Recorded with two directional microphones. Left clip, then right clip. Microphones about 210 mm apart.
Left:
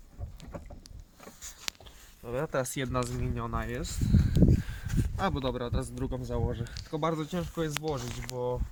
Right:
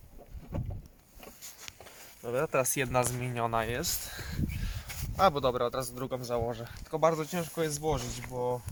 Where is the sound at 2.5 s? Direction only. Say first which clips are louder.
Right 2 dB; 20° right (ahead or behind).